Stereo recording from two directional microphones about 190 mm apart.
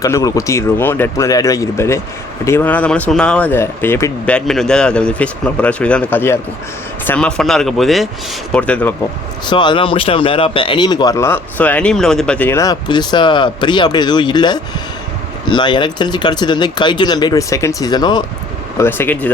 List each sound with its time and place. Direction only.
0.0 s speech: 15° left (ahead or behind)
9.5 s a man's voice: 25° left (ahead or behind); by 19.3 s 10° left (ahead or behind)